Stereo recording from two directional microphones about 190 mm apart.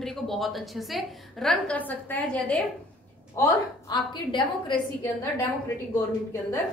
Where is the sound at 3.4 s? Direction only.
20° left (ahead or behind).